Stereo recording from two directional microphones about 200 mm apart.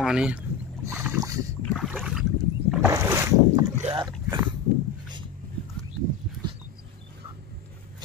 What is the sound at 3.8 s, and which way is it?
Speech, 25° right (ahead or behind).